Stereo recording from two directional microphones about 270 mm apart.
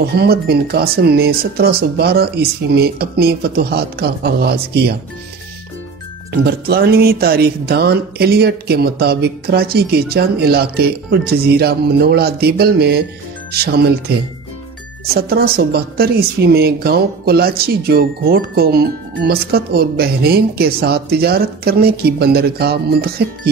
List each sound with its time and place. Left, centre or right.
0.0 s speech: right
6.4 s speech: right
15.1 s speech: right